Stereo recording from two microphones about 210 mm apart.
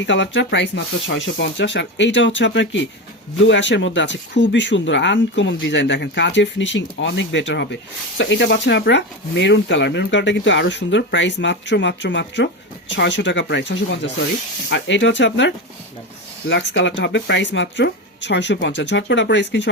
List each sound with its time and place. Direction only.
0.0 s speech: 60° left (ahead or behind)